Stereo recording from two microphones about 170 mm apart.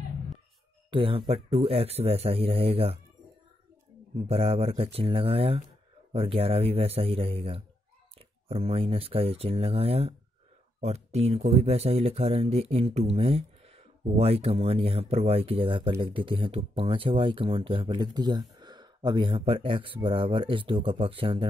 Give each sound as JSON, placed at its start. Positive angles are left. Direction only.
{"t": 0.8, "sound": "speech", "side_deg": -30}
{"t": 4.3, "sound": "speech", "side_deg": -35}